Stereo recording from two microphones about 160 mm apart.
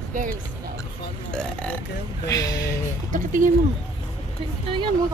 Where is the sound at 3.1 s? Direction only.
55° right (ahead or behind).